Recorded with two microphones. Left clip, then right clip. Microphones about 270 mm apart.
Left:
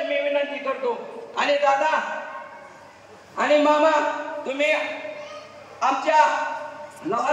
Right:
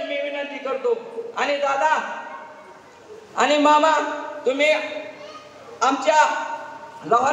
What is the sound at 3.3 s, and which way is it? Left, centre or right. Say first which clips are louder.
A man's voice: right 2 dB; centre.